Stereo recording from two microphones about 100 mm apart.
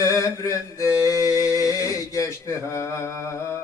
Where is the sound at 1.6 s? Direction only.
35° left (ahead or behind).